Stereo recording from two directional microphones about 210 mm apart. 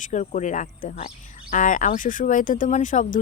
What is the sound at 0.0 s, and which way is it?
Speech, 35° left (ahead or behind).